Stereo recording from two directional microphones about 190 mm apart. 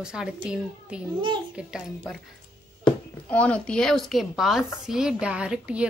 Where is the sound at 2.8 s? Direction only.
5° left (ahead or behind).